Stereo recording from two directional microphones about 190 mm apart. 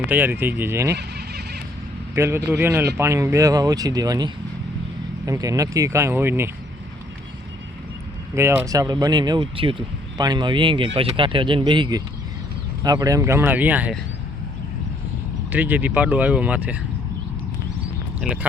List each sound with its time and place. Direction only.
0.1 s speech: 10° right (ahead or behind)
0.9 s a sound: 60° right (ahead or behind)
2.1 s speech: 15° right (ahead or behind)
8.4 s speech: 15° right (ahead or behind)
15.5 s speech: 10° right (ahead or behind)
18.2 s speech: 5° right (ahead or behind)